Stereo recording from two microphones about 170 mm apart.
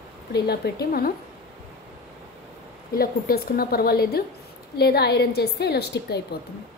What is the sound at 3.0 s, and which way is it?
A woman's voice, 60° left (ahead or behind).